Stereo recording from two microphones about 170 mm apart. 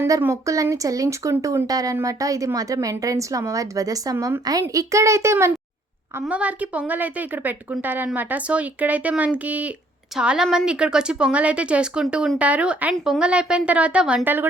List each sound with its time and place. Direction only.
0.0 s a woman's voice: 15° right (ahead or behind)